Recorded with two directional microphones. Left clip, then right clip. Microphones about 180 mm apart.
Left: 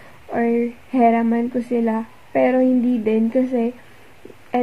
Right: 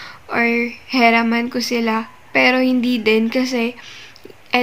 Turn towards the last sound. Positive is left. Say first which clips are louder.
# even
turn(degrees=-5)  # may be behind; listen again after turning